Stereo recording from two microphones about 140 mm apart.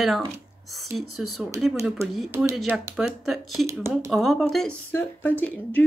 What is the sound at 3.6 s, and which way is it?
Speech, 20° right (ahead or behind).